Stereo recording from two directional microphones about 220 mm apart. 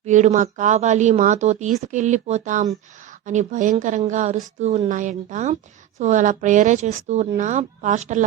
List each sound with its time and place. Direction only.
0.0 s speech: 30° right (ahead or behind)